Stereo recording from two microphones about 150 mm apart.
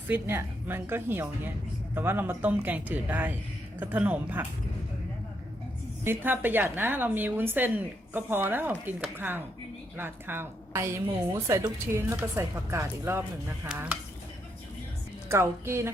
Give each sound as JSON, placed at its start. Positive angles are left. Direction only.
{"t": 0.1, "sound": "a woman's voice", "side_deg": -15}
{"t": 6.1, "sound": "a woman's voice", "side_deg": -15}
{"t": 15.3, "sound": "a woman's voice", "side_deg": -15}